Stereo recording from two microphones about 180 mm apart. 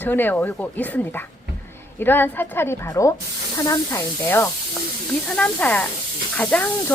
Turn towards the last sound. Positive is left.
turn(degrees=5)  # may be behind; listen again after turning